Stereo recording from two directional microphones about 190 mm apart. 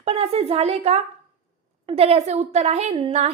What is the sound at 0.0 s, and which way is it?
A woman's voice, 35° right (ahead or behind).